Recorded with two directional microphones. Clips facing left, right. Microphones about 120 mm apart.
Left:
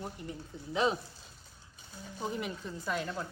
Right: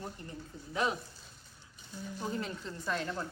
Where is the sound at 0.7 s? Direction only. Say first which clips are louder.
Left 3 dB; 25° left (ahead or behind).